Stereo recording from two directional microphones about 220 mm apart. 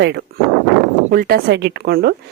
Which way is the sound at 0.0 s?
50° right (ahead or behind).